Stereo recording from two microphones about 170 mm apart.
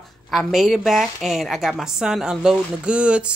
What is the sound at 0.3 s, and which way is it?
A woman's voice, centre (ahead or behind).